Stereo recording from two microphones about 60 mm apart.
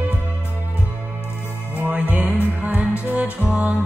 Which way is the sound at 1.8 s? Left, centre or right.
Right.